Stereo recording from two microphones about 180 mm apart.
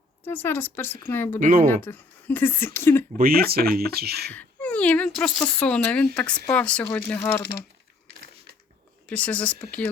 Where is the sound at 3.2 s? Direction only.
55° right (ahead or behind).